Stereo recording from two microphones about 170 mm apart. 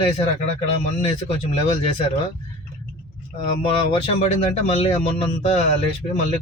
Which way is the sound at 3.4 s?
35° left (ahead or behind).